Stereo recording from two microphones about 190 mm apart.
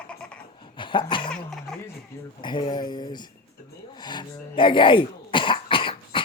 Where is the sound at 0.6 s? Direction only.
25° left (ahead or behind).